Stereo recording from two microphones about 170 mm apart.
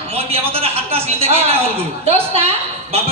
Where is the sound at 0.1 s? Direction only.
35° right (ahead or behind).